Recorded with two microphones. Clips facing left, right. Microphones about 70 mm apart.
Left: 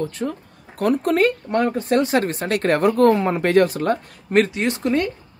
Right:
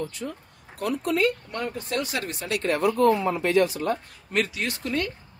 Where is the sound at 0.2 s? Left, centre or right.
Left.